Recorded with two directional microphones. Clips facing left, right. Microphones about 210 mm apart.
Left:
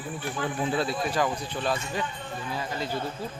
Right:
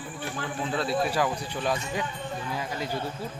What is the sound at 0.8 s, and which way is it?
Speech, 5° right (ahead or behind).